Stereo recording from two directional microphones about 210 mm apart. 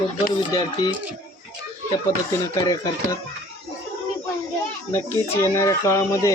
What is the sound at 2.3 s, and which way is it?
Speech, 15° left (ahead or behind).